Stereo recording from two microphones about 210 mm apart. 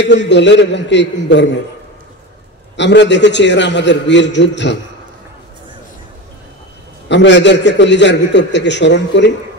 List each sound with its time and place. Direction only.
0.0 s a man's voice: 55° left (ahead or behind)
2.7 s a man's voice: 55° left (ahead or behind)
7.1 s a man's voice: 55° left (ahead or behind)